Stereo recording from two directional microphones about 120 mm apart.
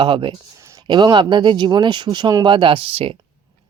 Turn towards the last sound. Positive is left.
turn(degrees=-50)  # may be behind; listen again after turning